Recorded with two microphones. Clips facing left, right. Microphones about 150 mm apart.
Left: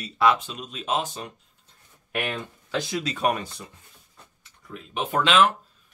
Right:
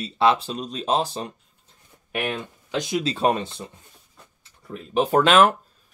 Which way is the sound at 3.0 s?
30° right (ahead or behind).